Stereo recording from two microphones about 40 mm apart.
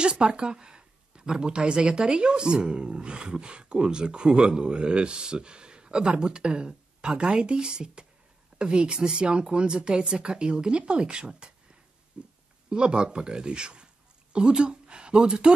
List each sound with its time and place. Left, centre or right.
0.0 s speech: right
12.2 s a sound: right
12.6 s speech: right